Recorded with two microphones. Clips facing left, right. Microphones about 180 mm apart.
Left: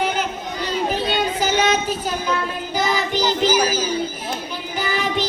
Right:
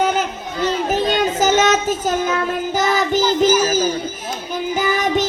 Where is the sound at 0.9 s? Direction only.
45° right (ahead or behind).